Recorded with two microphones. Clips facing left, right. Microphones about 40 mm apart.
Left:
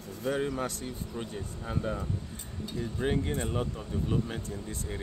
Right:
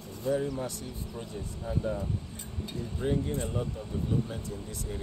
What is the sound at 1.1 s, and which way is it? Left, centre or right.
Speech, left.